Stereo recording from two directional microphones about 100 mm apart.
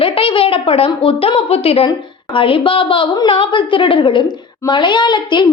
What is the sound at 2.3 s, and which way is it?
A woman's voice, 60° left (ahead or behind).